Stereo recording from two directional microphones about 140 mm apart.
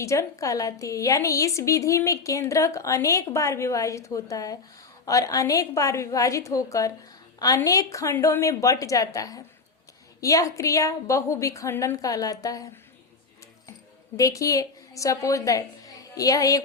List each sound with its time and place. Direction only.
0.0 s a woman's voice: 20° left (ahead or behind)
14.2 s a woman's voice: 25° left (ahead or behind)